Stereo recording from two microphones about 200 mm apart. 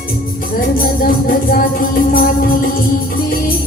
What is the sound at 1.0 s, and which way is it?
Music, 45° left (ahead or behind).